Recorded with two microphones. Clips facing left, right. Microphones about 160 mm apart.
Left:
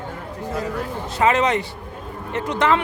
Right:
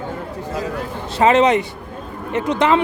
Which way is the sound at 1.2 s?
25° right (ahead or behind).